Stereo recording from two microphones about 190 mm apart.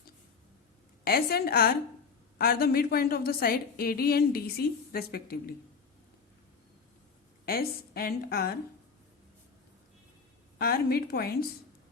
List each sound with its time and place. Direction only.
1.0 s a woman's voice: 55° left (ahead or behind)
7.4 s a woman's voice: 50° left (ahead or behind)
10.6 s a woman's voice: 55° left (ahead or behind)